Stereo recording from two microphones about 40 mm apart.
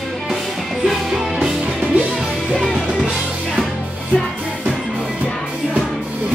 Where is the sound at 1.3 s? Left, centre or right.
Centre.